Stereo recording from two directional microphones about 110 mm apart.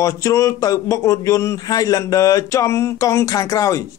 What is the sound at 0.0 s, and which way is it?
Speech, 30° left (ahead or behind).